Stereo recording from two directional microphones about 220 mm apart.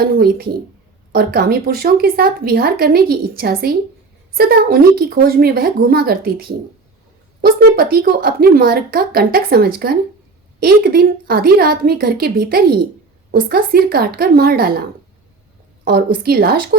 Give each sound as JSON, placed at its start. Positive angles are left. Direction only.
{"t": 0.0, "sound": "a woman's voice", "side_deg": -45}